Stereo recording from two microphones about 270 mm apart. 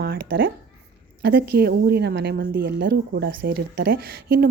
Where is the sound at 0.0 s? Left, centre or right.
Right.